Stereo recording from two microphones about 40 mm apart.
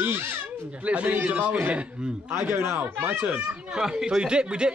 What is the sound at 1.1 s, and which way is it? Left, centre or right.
Speech, right.